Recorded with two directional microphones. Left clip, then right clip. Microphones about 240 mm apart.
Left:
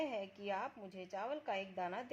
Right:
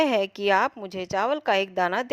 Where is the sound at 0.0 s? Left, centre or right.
Right.